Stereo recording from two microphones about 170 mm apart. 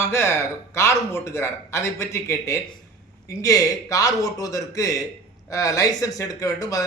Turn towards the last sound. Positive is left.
turn(degrees=20)  # may be behind; listen again after turning